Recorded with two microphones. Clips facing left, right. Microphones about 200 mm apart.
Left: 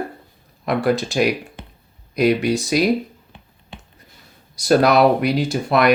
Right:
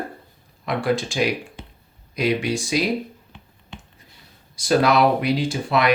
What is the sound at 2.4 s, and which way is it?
Speech, 40° left (ahead or behind).